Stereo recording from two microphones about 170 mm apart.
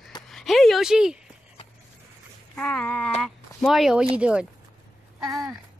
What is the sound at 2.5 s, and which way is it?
A woman's voice, 5° left (ahead or behind).